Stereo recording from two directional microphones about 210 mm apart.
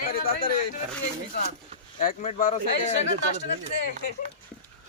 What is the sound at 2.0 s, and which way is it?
Speech, 35° left (ahead or behind).